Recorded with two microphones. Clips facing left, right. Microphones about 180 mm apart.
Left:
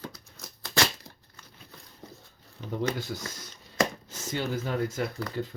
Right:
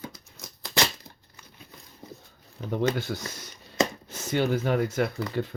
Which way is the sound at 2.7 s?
65° right (ahead or behind).